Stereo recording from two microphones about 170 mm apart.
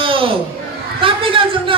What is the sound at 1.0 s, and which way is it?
Chatter, 30° right (ahead or behind).